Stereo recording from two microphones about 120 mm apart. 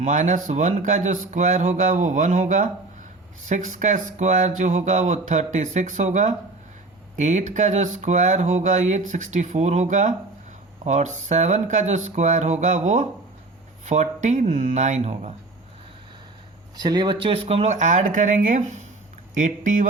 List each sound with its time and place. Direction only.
0.0 s speech: 90° right; by 15.3 s 70° right (ahead or behind)
16.7 s speech: 35° right (ahead or behind); by 18.9 s 80° right
19.4 s speech: 90° right